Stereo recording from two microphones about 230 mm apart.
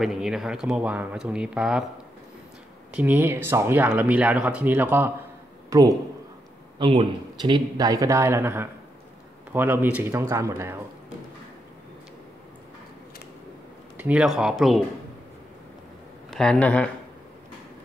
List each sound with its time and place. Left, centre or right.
0.0 s speech: centre
2.9 s a man's voice: centre
13.9 s speech: centre
16.3 s speech: centre